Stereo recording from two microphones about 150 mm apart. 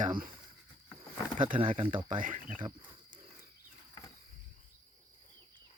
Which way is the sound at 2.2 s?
65° right (ahead or behind).